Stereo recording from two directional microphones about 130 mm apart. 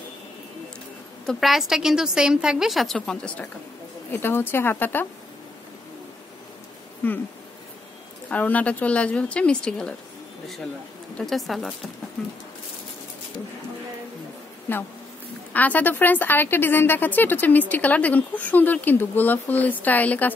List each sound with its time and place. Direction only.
1.2 s a woman's voice: centre (ahead or behind); by 5.0 s 15° left (ahead or behind)
7.0 s a woman's voice: 15° left (ahead or behind)
8.3 s a woman's voice: 10° left (ahead or behind)
11.1 s a woman's voice: centre (ahead or behind)
14.7 s a woman's voice: 15° left (ahead or behind)